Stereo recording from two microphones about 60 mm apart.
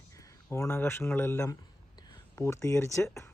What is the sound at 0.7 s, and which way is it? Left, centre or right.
Speech, left.